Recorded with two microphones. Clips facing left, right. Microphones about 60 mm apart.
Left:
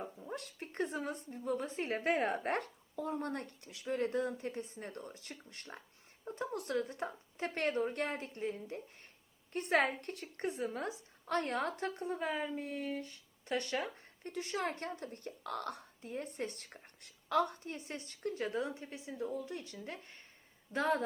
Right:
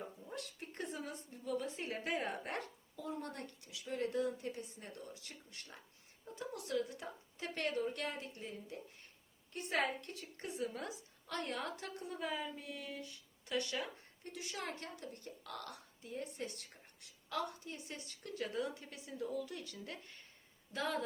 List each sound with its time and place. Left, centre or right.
0.3 s a woman's voice: left